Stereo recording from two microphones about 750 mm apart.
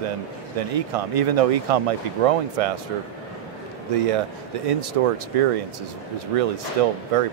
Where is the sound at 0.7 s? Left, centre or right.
Right.